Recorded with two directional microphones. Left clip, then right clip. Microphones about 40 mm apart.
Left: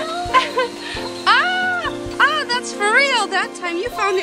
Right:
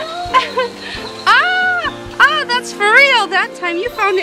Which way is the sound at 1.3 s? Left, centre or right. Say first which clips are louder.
Right 4 dB; centre.